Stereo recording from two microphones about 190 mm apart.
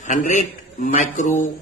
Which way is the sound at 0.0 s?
40° left (ahead or behind).